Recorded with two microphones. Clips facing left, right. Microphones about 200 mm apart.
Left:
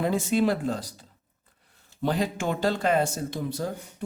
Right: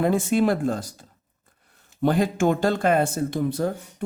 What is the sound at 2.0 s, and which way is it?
Speech, 50° right (ahead or behind).